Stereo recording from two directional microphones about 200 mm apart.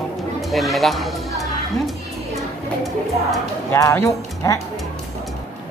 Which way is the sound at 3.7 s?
15° left (ahead or behind).